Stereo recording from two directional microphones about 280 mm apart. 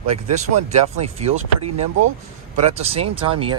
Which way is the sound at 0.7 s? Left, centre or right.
Right.